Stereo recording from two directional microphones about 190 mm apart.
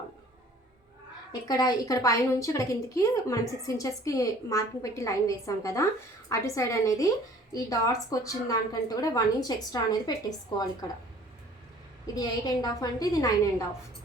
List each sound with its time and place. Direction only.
1.3 s a woman's voice: 20° left (ahead or behind)
12.1 s a woman's voice: 20° left (ahead or behind)